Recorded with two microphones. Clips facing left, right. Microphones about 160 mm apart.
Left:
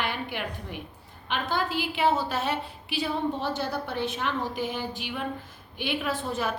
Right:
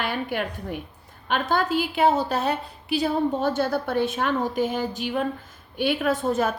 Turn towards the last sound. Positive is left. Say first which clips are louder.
# right 7 dB
turn(degrees=-45)  # may be behind; listen again after turning